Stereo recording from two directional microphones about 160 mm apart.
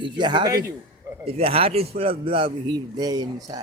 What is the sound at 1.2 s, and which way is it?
A man's voice, 35° right (ahead or behind).